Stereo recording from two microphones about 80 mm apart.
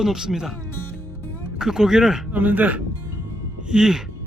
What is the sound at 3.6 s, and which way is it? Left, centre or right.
Speech, centre.